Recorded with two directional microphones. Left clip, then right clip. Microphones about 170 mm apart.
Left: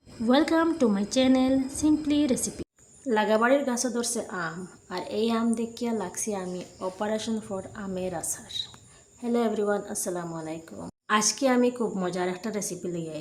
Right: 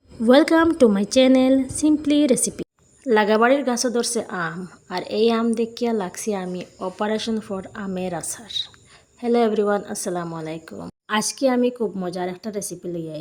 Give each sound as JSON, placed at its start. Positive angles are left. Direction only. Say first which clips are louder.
{"t": 0.3, "sound": "speech", "louder": "right 8 dB", "side_deg": -35}